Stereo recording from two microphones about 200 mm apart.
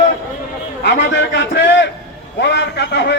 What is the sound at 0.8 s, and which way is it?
Speech, 60° left (ahead or behind).